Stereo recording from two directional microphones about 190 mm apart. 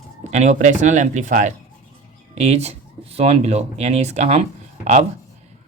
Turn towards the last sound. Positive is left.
turn(degrees=-35)  # may be behind; listen again after turning